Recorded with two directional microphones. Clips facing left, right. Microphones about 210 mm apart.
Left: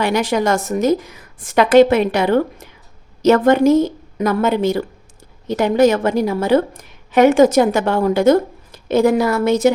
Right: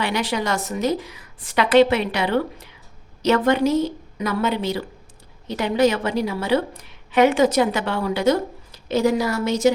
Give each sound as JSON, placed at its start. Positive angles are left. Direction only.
{"t": 0.0, "sound": "a woman's voice", "side_deg": 45}